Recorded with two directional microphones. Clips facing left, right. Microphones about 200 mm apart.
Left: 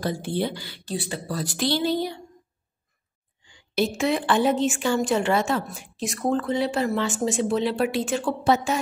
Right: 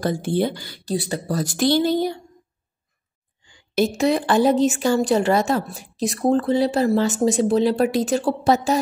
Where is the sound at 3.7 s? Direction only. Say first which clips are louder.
Right 4 dB; 40° right (ahead or behind).